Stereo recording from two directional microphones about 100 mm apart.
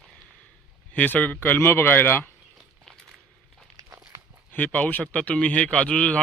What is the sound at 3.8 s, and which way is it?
Walk, 35° right (ahead or behind).